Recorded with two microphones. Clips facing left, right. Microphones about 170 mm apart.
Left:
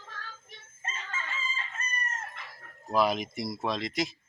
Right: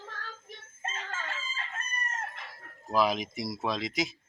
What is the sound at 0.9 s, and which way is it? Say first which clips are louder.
Chicken: left 3 dB; 55° right (ahead or behind).